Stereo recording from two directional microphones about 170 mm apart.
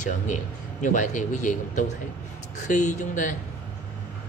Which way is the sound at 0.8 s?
50° left (ahead or behind).